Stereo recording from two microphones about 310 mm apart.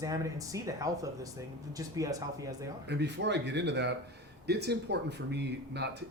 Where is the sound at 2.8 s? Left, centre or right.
Right.